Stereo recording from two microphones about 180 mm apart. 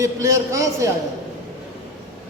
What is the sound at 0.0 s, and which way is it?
Speech, 15° right (ahead or behind).